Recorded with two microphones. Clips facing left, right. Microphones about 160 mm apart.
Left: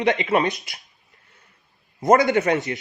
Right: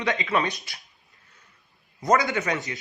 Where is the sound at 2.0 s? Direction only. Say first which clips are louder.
Left 6 dB; 25° left (ahead or behind).